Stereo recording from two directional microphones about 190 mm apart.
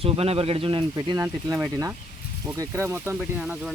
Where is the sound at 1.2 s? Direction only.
15° right (ahead or behind).